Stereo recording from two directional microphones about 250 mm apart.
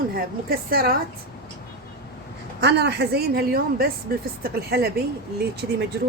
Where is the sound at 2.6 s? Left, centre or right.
Right.